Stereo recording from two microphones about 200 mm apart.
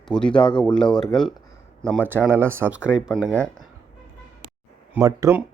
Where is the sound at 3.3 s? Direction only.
5° left (ahead or behind).